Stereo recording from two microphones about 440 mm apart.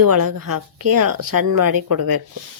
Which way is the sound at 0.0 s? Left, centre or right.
Right.